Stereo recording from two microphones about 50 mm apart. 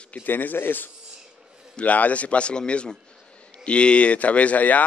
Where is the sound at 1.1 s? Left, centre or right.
Centre.